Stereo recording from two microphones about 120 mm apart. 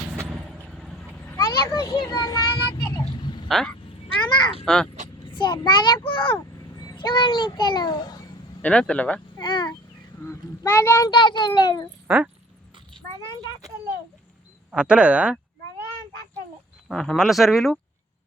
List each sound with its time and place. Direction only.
0.3 s vehicle: 5° right (ahead or behind)
1.4 s a sound: 40° left (ahead or behind)
3.5 s speech: 5° left (ahead or behind)
5.3 s a child's voice: 40° left (ahead or behind)
8.6 s speech: 10° left (ahead or behind)
9.4 s a sound: 40° left (ahead or behind)
10.2 s a child's voice: 20° left (ahead or behind)
11.1 s a child's voice: 40° left (ahead or behind)
12.0 s speech: 10° right (ahead or behind)
14.7 s speech: 10° right (ahead or behind)
16.9 s speech: 5° left (ahead or behind)